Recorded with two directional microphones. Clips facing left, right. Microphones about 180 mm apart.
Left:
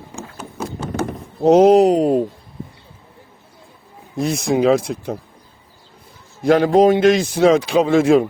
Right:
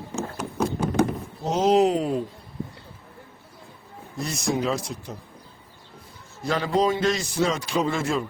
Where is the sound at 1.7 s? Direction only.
40° left (ahead or behind).